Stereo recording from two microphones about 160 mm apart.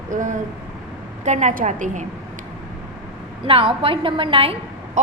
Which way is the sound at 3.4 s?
35° right (ahead or behind).